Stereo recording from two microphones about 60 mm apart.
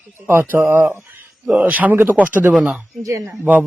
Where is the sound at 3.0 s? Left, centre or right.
Right.